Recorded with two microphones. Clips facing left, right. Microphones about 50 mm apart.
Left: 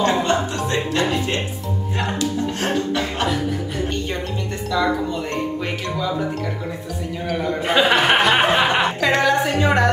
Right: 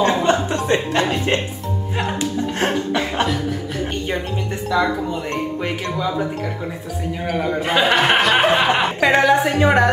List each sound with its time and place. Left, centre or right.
0.0 s speech: right
2.6 s chuckle: right
4.6 s speech: centre
7.2 s speech: centre
9.0 s a woman's voice: centre